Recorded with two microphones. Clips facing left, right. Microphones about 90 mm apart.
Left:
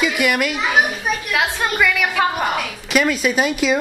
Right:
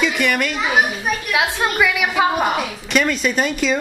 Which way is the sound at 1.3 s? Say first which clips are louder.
Right 1 dB; 5° right (ahead or behind).